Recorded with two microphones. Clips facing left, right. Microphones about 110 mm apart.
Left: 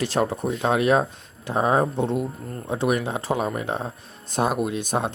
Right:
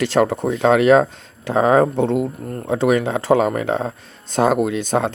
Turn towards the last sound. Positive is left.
turn(degrees=-90)